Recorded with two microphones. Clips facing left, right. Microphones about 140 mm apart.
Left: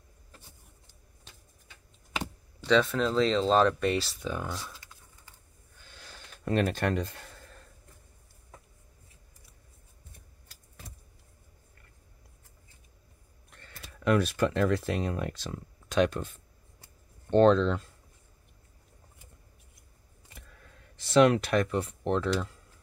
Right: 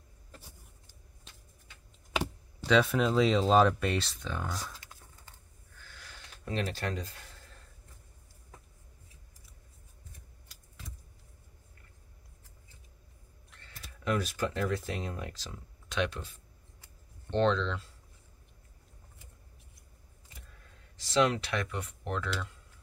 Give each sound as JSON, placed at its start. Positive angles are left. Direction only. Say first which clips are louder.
{"t": 2.1, "sound": "speech", "louder": "right 3 dB", "side_deg": -5}
{"t": 5.8, "sound": "snort", "louder": "left 1 dB", "side_deg": 25}
{"t": 6.4, "sound": "speech", "louder": "left 7 dB", "side_deg": 60}
{"t": 13.7, "sound": "speech", "louder": "left 6 dB", "side_deg": 65}
{"t": 21.0, "sound": "speech", "louder": "left 6 dB", "side_deg": 60}